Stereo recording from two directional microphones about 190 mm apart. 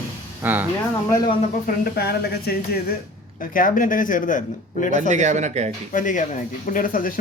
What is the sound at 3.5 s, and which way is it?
Speech, 45° left (ahead or behind).